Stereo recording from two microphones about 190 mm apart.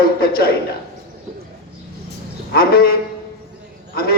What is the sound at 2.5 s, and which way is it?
Speech, 55° left (ahead or behind).